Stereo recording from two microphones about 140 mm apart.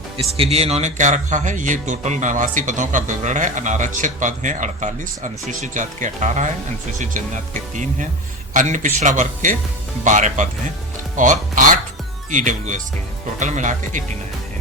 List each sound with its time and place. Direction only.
0.3 s a man's voice: 45° right (ahead or behind); by 14.0 s 60° right (ahead or behind)